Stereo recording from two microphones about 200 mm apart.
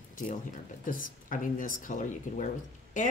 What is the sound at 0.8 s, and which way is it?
A woman's voice, 40° left (ahead or behind).